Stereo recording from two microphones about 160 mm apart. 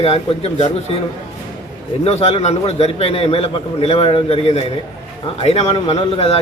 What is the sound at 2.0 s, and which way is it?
A man's voice, 40° left (ahead or behind).